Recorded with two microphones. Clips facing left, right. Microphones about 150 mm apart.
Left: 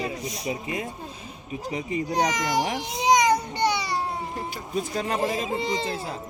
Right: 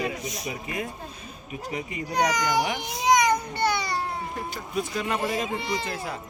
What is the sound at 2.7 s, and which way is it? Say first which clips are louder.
Baby cry: left 1 dB; 25° left (ahead or behind).